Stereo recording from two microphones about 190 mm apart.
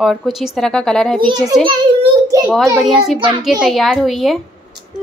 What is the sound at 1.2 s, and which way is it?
A child's voice, 25° right (ahead or behind).